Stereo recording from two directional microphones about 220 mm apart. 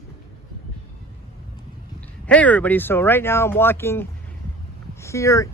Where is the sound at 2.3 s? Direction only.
5° left (ahead or behind).